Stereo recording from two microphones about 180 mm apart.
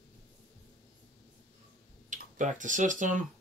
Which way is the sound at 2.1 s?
45° right (ahead or behind).